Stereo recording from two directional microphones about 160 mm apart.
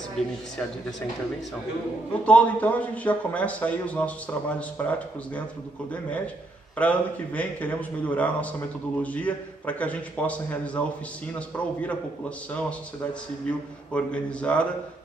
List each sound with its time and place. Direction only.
0.2 s speech: 45° left (ahead or behind)
2.2 s a man's voice: 10° left (ahead or behind)
6.8 s a man's voice: 10° left (ahead or behind)
13.5 s a man's voice: 5° left (ahead or behind)